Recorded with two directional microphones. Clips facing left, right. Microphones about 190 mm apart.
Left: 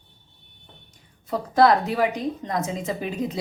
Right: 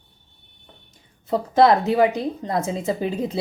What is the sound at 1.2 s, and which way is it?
A woman's voice, 25° right (ahead or behind).